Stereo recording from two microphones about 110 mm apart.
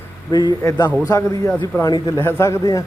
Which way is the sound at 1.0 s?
30° left (ahead or behind).